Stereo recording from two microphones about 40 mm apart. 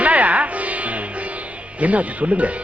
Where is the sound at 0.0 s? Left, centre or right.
Right.